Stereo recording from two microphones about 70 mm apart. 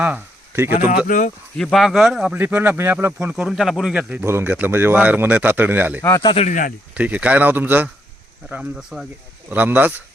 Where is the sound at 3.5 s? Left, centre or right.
Centre.